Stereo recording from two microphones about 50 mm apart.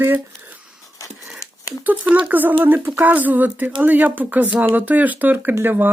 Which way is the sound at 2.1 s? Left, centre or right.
Right.